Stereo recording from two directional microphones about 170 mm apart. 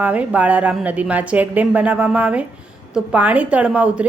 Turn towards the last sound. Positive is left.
turn(degrees=-10)  # may be behind; listen again after turning